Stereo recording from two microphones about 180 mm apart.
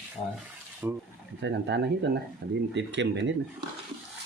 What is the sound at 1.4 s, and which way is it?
Speech, 75° right (ahead or behind).